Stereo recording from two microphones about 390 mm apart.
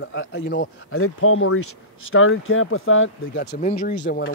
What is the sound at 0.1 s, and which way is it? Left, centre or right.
Speech, left.